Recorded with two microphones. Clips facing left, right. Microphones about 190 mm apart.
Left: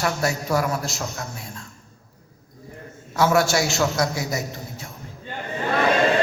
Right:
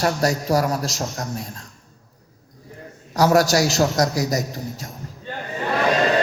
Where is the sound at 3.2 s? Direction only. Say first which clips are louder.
Right 3 dB; 40° right (ahead or behind).